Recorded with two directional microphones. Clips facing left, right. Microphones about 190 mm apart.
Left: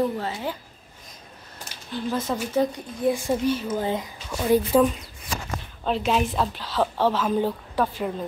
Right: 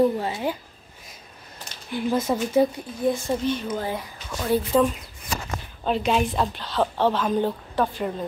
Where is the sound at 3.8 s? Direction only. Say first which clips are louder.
Left 3 dB; 20° left (ahead or behind).